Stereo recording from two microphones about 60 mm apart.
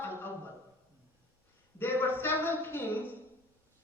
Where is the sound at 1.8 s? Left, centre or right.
Left.